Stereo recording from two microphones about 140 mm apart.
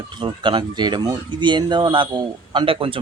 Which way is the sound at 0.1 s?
35° right (ahead or behind).